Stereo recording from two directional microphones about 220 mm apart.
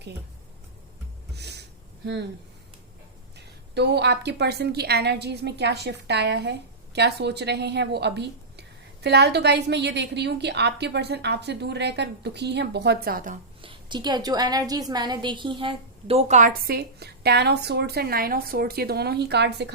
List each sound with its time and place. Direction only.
1.4 s a sound: 50° right (ahead or behind)
3.3 s a woman's voice: 50° right (ahead or behind)
13.6 s a woman's voice: 20° right (ahead or behind); by 19.7 s 50° right (ahead or behind)